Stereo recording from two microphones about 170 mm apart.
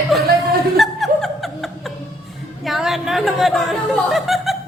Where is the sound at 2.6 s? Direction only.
Centre (ahead or behind).